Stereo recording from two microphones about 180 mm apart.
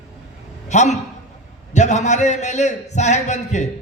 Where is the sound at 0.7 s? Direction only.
40° left (ahead or behind).